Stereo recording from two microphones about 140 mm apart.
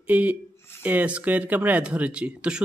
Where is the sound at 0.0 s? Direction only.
10° right (ahead or behind).